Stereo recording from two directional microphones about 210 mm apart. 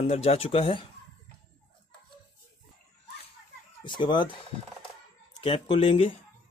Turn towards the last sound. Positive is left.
turn(degrees=25)  # may be behind; listen again after turning